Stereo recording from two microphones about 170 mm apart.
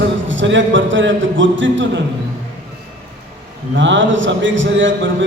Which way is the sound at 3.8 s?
90° right.